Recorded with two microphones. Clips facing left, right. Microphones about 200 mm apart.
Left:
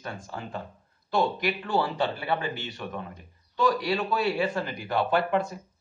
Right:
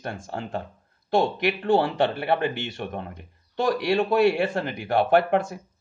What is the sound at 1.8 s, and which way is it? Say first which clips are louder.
Speech: right 4 dB; 65° right (ahead or behind).